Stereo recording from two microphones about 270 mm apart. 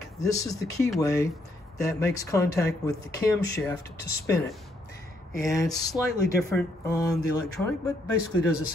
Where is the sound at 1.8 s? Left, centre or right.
Centre.